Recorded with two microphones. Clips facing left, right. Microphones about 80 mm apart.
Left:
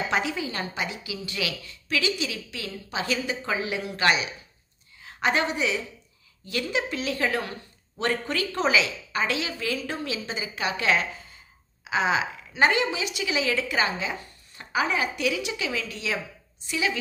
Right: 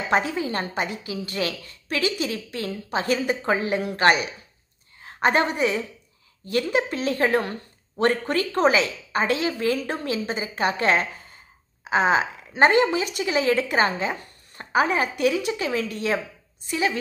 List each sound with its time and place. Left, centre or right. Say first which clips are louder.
0.1 s a woman's voice: right 4 dB; right